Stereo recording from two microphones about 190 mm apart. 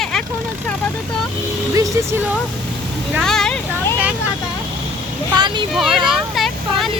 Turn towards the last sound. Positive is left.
turn(degrees=0)  # may be behind; listen again after turning